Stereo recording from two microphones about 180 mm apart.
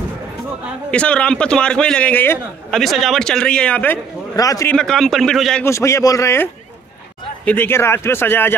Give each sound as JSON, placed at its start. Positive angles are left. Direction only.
{"t": 0.9, "sound": "a man's voice", "side_deg": 5}
{"t": 4.7, "sound": "a man's voice", "side_deg": 5}
{"t": 5.7, "sound": "speech", "side_deg": 15}